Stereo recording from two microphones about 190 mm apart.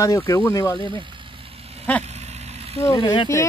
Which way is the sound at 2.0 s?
35° right (ahead or behind).